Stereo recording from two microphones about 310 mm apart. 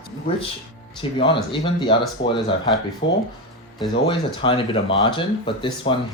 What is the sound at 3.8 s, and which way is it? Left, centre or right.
Speech, centre.